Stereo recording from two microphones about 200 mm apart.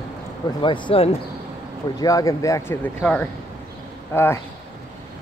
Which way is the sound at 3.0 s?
5° left (ahead or behind).